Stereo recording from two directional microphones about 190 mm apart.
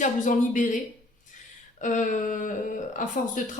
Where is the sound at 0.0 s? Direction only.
40° left (ahead or behind).